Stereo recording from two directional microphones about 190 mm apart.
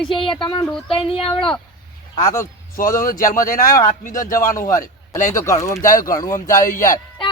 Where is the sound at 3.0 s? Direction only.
45° left (ahead or behind).